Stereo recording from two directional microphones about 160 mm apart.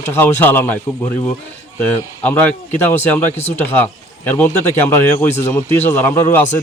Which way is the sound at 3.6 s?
10° left (ahead or behind).